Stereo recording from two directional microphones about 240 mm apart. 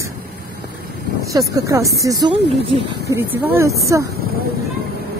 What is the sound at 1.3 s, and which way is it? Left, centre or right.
Speech, centre.